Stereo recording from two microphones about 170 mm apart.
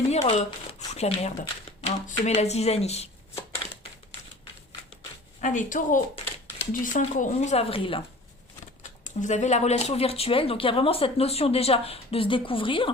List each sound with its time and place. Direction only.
0.1 s speech: 40° left (ahead or behind)
5.4 s speech: 45° left (ahead or behind)
9.0 s speech: 45° left (ahead or behind)